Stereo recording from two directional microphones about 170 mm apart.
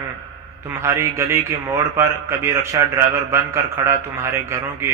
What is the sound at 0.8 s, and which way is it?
A man's voice, 15° right (ahead or behind).